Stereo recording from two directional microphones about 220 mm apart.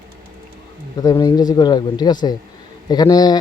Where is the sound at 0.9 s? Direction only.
15° left (ahead or behind).